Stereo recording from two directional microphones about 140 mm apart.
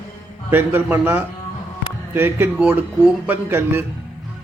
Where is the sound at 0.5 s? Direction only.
15° right (ahead or behind).